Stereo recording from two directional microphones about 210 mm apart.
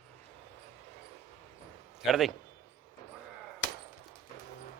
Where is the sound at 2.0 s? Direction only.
Centre (ahead or behind).